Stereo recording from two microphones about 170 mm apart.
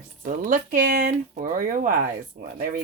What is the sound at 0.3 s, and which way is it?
Speech, 50° right (ahead or behind).